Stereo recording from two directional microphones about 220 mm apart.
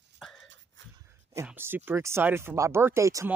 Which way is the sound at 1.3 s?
10° right (ahead or behind).